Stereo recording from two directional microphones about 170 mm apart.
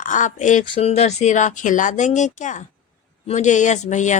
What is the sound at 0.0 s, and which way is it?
Speech, 50° left (ahead or behind).